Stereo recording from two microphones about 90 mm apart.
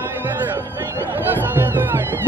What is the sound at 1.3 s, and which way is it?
Music, 20° right (ahead or behind).